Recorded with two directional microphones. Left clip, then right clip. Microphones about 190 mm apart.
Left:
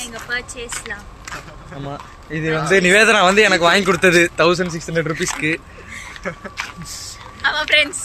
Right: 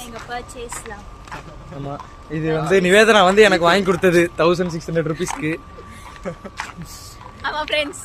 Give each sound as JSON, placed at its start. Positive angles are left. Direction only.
{"t": 0.0, "sound": "speech", "side_deg": -20}
{"t": 1.8, "sound": "speech", "side_deg": 5}
{"t": 7.7, "sound": "a woman's voice", "side_deg": -15}